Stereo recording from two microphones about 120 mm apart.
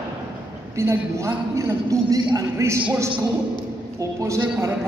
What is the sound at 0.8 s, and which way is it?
A man's voice, 25° right (ahead or behind).